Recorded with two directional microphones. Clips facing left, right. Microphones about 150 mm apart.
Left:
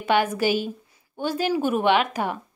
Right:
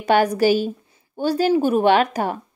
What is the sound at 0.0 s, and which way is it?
Speech, 40° right (ahead or behind).